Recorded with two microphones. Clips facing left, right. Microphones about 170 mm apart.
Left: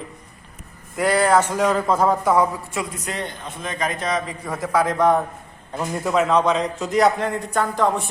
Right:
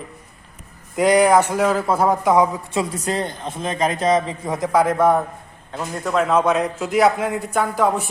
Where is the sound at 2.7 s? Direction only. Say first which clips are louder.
Right 5 dB; 35° right (ahead or behind).